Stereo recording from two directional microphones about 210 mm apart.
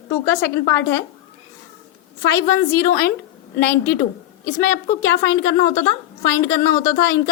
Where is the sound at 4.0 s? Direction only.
45° left (ahead or behind).